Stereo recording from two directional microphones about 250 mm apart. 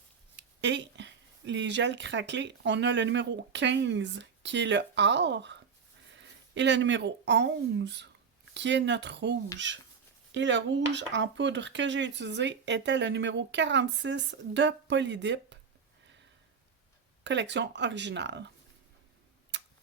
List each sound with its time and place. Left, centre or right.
0.3 s speech: right
17.2 s speech: right
19.5 s tick-tock: right